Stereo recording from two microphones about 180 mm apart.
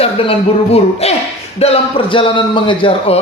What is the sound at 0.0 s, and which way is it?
A man's voice, 35° left (ahead or behind).